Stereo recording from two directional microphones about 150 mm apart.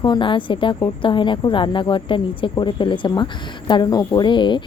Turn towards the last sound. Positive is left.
turn(degrees=30)  # may be behind; listen again after turning